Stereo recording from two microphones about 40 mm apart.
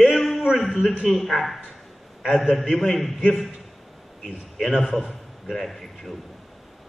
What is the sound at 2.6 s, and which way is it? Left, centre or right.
Speech, centre.